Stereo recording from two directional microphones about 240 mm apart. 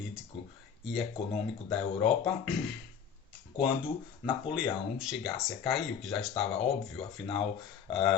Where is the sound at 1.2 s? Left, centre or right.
Left.